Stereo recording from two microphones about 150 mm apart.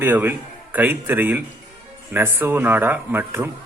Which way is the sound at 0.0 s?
15° right (ahead or behind).